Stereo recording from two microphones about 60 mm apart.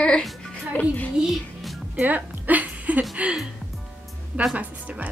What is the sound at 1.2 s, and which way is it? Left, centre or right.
Speech, centre.